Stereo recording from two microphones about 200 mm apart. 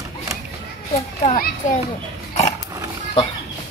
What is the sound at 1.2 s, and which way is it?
Speech, 35° left (ahead or behind).